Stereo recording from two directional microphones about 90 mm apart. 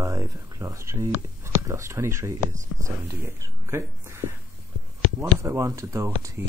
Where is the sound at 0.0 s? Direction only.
40° right (ahead or behind).